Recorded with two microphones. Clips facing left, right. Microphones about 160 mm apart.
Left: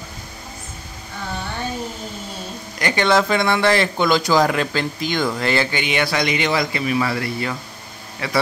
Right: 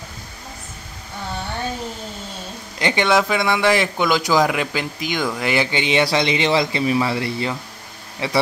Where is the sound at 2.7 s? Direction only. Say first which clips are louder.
Right 1 dB; 20° right (ahead or behind).